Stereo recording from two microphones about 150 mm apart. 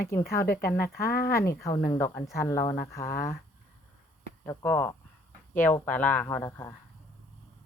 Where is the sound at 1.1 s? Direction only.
80° left.